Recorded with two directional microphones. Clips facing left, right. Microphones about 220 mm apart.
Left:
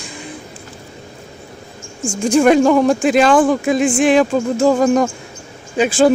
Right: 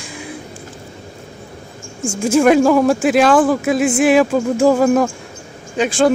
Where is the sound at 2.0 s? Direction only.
10° right (ahead or behind).